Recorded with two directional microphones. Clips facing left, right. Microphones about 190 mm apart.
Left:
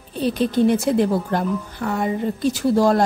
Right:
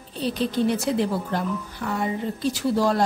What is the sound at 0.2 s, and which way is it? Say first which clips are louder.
Speech: left 5 dB; 50° left (ahead or behind).